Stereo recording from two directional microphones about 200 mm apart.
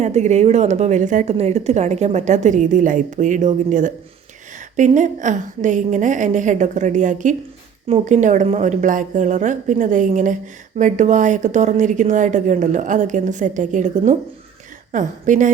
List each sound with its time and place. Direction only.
0.0 s a woman's voice: 35° right (ahead or behind)